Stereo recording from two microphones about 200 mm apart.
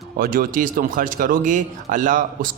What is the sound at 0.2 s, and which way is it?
Speech, 45° right (ahead or behind).